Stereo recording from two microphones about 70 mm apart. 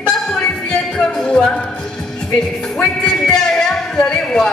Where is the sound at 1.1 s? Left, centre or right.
Centre.